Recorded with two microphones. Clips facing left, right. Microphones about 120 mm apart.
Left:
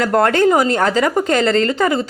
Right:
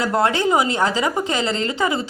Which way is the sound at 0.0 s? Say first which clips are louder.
Left 5 dB; 50° left (ahead or behind).